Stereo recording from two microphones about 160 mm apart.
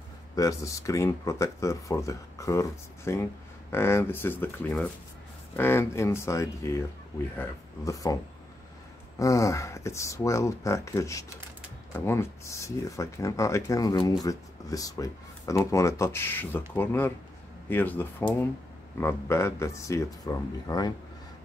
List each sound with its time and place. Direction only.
0.4 s speech: 20° left (ahead or behind)
9.2 s speech: 20° left (ahead or behind)